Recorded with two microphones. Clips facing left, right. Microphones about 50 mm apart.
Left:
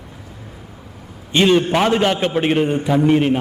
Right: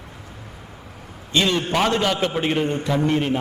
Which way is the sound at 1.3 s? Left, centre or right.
Left.